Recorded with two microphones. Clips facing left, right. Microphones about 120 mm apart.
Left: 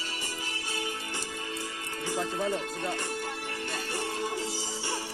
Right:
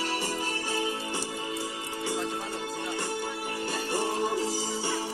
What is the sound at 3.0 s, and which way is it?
Music, 20° right (ahead or behind).